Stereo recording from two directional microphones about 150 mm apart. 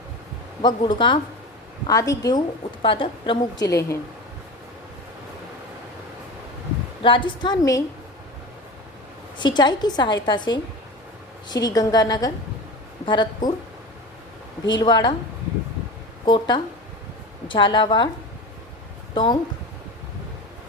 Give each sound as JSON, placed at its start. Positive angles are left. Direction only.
{"t": 0.6, "sound": "a woman's voice", "side_deg": 30}
{"t": 2.8, "sound": "a woman's voice", "side_deg": 35}
{"t": 3.7, "sound": "a woman's voice", "side_deg": 20}
{"t": 7.0, "sound": "a woman's voice", "side_deg": 35}
{"t": 9.4, "sound": "a woman's voice", "side_deg": 30}
{"t": 14.8, "sound": "a woman's voice", "side_deg": 25}
{"t": 16.2, "sound": "a woman's voice", "side_deg": 30}
{"t": 19.1, "sound": "a woman's voice", "side_deg": 30}